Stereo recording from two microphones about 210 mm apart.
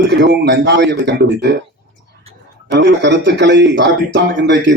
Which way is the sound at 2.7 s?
55° right (ahead or behind).